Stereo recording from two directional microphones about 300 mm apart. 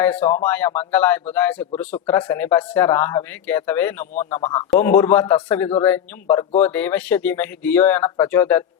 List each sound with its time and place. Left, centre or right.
0.0 s speech: centre